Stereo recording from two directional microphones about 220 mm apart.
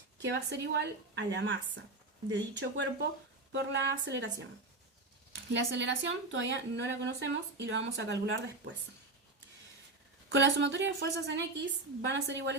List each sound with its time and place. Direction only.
0.2 s a woman's voice: 50° right (ahead or behind)
10.3 s a woman's voice: 55° right (ahead or behind)